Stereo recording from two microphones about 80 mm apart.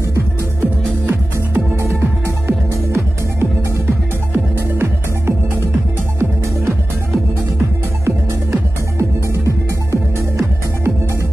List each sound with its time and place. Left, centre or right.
0.1 s music: right
7.5 s music: right